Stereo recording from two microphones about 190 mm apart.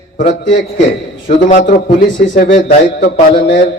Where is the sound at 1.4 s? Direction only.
45° left (ahead or behind); by 3.5 s 60° left (ahead or behind).